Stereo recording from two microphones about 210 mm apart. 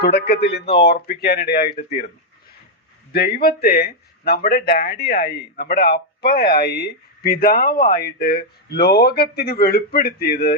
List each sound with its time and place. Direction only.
0.0 s speech: 50° left (ahead or behind)
3.1 s speech: 50° left (ahead or behind)